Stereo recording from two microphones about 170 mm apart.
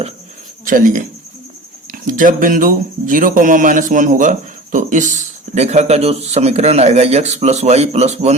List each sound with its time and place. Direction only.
0.6 s speech: 50° right (ahead or behind)